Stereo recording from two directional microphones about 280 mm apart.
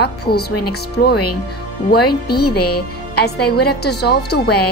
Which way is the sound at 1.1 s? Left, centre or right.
Left.